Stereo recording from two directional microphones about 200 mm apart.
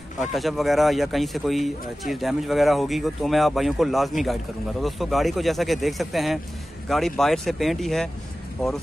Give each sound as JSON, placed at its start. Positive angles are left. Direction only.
{"t": 0.2, "sound": "speech", "side_deg": 0}